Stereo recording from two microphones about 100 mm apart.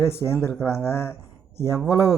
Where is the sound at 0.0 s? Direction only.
25° left (ahead or behind).